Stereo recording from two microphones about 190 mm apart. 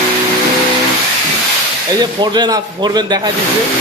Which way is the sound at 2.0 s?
20° right (ahead or behind).